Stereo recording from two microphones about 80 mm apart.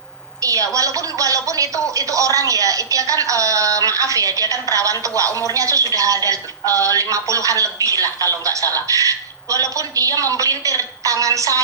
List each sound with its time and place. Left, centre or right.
0.4 s a woman's voice: right